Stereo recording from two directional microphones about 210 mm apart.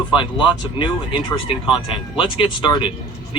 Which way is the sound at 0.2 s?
20° left (ahead or behind).